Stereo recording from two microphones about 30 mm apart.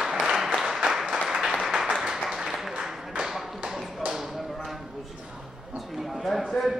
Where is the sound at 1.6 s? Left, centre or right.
Centre.